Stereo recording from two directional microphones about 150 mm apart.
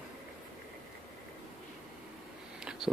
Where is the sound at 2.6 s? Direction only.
5° right (ahead or behind).